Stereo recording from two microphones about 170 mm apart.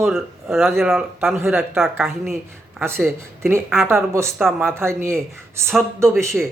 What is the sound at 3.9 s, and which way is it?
Speech, 15° right (ahead or behind).